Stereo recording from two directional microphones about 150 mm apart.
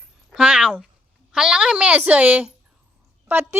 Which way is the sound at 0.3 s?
5° right (ahead or behind).